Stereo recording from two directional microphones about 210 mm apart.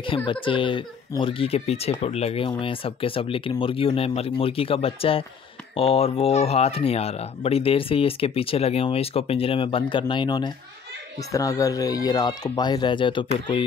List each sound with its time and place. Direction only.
0.0 s speech: 25° left (ahead or behind)